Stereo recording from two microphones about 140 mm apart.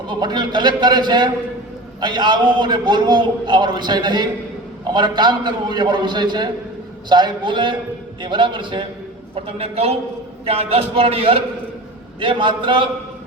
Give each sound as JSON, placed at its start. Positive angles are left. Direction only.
{"t": 0.1, "sound": "a man's voice", "side_deg": -30}